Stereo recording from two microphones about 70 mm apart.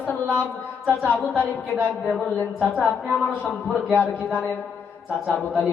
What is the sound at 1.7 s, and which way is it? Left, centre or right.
Speech, right.